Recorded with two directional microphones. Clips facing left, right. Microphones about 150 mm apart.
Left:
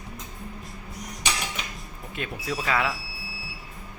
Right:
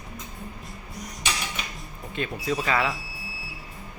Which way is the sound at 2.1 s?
Centre (ahead or behind).